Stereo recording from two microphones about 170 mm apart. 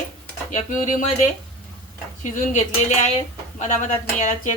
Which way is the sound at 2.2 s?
45° left (ahead or behind).